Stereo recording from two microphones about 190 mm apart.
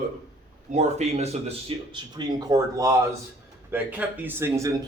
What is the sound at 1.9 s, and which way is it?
Speech, 20° right (ahead or behind).